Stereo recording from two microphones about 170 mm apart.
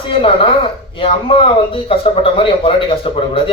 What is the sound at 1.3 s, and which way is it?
A man's voice, 35° left (ahead or behind).